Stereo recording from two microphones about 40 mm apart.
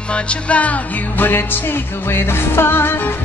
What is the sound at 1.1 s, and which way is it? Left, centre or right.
Music, left.